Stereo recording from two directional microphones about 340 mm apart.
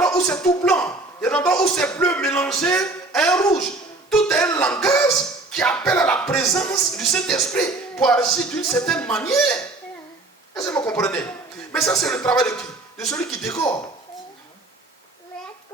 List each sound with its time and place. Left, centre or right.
0.0 s a man's voice: centre